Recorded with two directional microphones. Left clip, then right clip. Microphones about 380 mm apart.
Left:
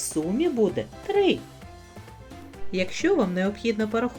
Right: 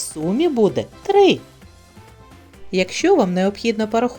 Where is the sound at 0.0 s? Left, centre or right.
Right.